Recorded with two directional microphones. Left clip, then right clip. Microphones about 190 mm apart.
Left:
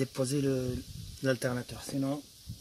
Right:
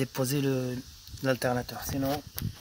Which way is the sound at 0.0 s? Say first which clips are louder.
Right 1 dB; 15° right (ahead or behind).